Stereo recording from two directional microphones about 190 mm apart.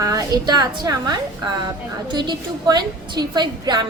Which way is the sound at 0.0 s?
20° right (ahead or behind).